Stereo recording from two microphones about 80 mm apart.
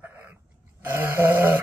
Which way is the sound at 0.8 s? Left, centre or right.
Right.